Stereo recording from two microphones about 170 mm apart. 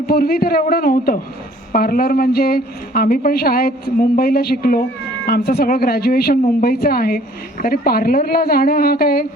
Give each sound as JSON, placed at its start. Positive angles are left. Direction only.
{"t": 0.1, "sound": "a woman's voice", "side_deg": 65}